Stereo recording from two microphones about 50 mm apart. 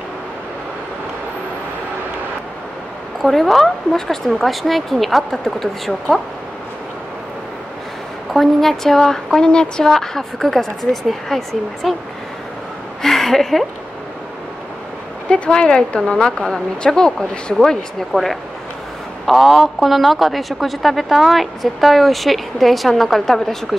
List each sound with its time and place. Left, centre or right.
3.2 s a man's voice: centre
8.3 s a woman's voice: centre
13.0 s a woman's voice: centre
15.2 s a woman's voice: centre
18.1 s a man's voice: centre